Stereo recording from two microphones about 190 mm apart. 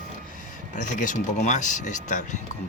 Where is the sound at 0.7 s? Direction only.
40° left (ahead or behind).